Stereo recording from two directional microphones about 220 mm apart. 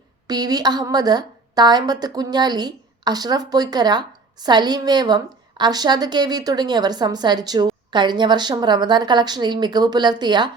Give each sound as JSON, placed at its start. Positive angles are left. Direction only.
{"t": 0.3, "sound": "a woman's voice", "side_deg": -20}